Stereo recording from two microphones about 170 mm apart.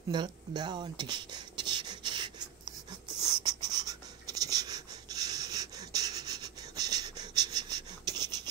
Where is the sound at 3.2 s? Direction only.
25° right (ahead or behind).